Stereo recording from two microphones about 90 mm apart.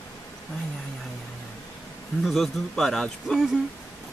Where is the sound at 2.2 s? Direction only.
Centre (ahead or behind).